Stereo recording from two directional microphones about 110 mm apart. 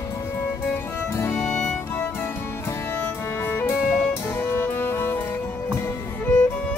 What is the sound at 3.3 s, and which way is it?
Music, 20° left (ahead or behind).